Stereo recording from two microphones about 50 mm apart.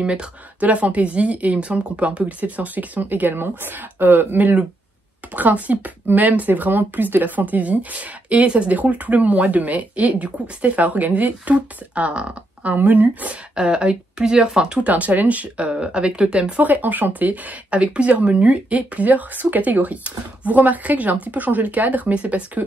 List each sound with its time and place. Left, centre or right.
0.0 s a woman's voice: right
12.7 s speech: right
13.6 s a woman's voice: centre
16.6 s speech: right